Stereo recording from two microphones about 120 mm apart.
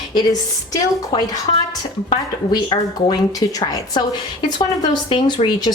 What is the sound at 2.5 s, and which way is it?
Speech, 35° left (ahead or behind).